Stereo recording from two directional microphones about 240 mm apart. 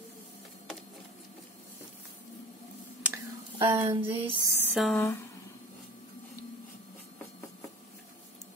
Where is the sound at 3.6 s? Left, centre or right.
Centre.